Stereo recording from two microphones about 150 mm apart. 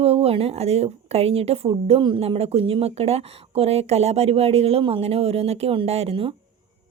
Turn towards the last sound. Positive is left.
turn(degrees=-40)  # may be behind; listen again after turning